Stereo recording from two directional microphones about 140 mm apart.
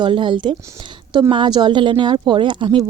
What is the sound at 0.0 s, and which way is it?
A woman's voice, 35° right (ahead or behind).